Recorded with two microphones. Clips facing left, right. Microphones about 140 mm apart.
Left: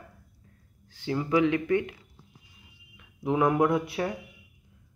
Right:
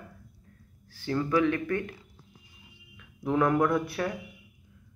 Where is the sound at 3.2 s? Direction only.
15° left (ahead or behind).